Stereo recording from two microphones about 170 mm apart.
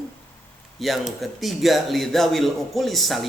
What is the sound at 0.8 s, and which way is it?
A man's voice, centre (ahead or behind).